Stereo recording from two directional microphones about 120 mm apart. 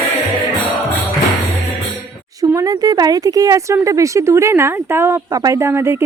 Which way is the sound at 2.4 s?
30° right (ahead or behind).